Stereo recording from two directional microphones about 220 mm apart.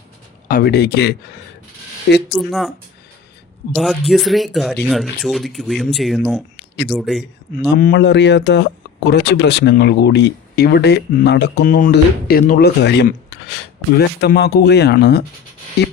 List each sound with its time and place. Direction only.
0.4 s speech: 40° left (ahead or behind)
2.3 s speech: centre (ahead or behind)
3.8 s speech: centre (ahead or behind)
6.6 s a sound: 50° left (ahead or behind)
6.9 s speech: centre (ahead or behind)
7.2 s speech: 45° left (ahead or behind)
15.8 s music: 50° left (ahead or behind)